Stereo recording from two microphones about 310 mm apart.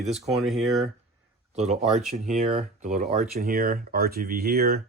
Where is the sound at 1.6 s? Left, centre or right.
Right.